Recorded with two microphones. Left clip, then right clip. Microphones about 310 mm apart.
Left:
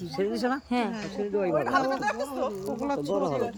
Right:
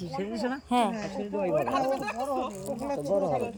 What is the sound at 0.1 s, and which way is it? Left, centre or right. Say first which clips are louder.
Speech: left 5 dB; centre.